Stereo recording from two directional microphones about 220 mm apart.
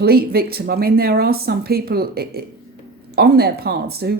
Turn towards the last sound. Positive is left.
turn(degrees=-45)  # may be behind; listen again after turning